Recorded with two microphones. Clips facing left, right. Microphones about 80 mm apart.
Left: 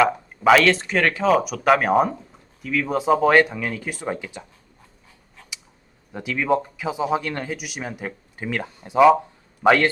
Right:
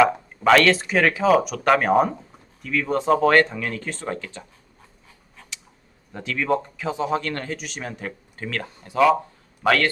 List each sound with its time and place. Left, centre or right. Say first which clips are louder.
0.0 s speech: even; centre
6.1 s speech: left 2 dB; centre